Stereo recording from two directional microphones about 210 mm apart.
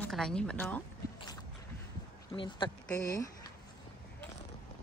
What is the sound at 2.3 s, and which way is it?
Speech, 25° left (ahead or behind).